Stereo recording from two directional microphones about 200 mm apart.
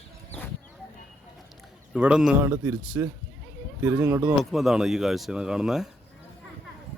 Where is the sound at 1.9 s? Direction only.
5° right (ahead or behind).